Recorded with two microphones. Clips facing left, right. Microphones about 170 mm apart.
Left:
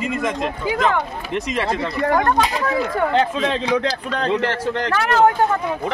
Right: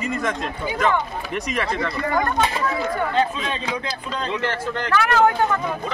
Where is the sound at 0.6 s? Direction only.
90° left.